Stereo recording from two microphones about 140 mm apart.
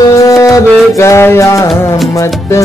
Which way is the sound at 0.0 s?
25° left (ahead or behind).